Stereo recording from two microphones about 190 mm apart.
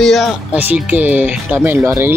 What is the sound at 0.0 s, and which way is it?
Speech, centre (ahead or behind).